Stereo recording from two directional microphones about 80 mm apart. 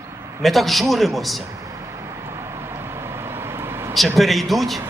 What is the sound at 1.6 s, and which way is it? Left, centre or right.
Vehicle, right.